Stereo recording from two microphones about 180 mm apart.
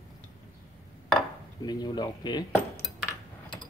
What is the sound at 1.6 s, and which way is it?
Speech, 25° left (ahead or behind).